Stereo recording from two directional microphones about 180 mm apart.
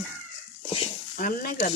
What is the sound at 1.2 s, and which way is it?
Speech, 50° left (ahead or behind).